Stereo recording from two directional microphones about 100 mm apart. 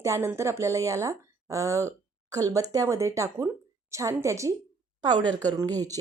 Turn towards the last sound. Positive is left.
turn(degrees=-35)  # may be behind; listen again after turning